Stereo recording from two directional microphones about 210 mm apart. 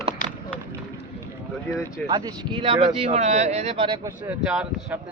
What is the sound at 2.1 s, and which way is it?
Speech, 20° right (ahead or behind).